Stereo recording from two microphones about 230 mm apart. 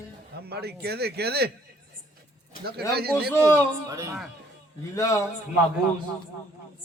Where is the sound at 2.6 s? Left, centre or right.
Right.